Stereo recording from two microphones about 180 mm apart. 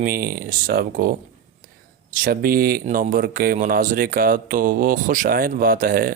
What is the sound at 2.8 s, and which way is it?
Speech, 50° right (ahead or behind).